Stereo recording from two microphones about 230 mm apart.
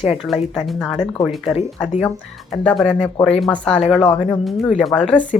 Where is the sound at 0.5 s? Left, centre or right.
Centre.